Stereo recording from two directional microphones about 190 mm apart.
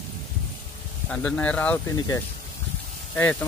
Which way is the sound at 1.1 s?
5° left (ahead or behind).